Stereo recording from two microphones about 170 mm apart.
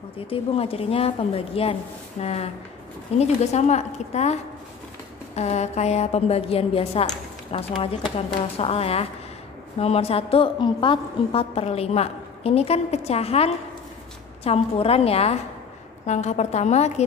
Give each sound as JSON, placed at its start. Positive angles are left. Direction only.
{"t": 0.3, "sound": "a woman's voice", "side_deg": 35}